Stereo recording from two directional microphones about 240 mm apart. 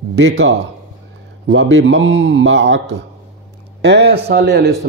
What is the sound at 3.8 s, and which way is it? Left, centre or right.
Speech, right.